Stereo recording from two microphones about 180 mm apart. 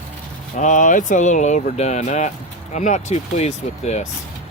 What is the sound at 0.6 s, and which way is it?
Speech, 45° left (ahead or behind).